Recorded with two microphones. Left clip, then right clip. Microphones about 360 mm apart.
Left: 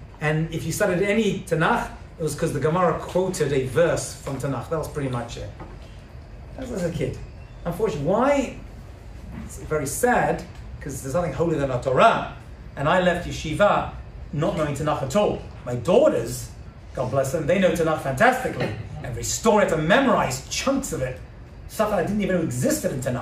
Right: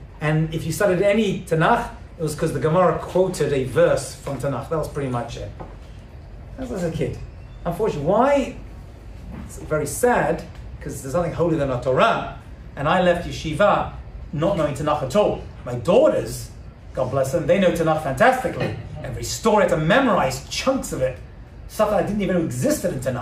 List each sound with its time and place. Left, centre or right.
0.2 s speech: centre
7.0 s speech: centre
9.7 s speech: centre